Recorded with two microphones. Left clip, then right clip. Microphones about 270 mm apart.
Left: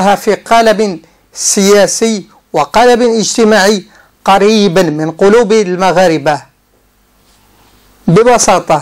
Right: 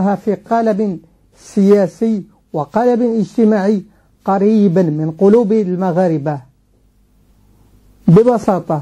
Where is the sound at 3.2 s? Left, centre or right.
Centre.